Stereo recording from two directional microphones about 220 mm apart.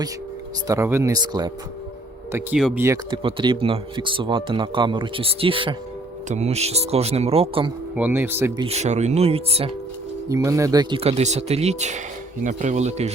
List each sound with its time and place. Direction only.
0.7 s speech: 10° right (ahead or behind)
2.3 s speech: 5° right (ahead or behind); by 7.7 s 25° right (ahead or behind)
7.9 s speech: 10° right (ahead or behind)
8.6 s speech: 30° right (ahead or behind)
10.2 s speech: 15° right (ahead or behind); by 13.1 s 30° right (ahead or behind)